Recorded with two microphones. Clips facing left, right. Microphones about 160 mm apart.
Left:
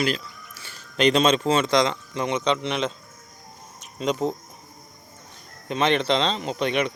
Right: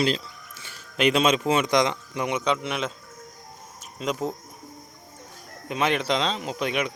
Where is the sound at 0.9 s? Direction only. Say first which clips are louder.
Left 2 dB; 5° right (ahead or behind).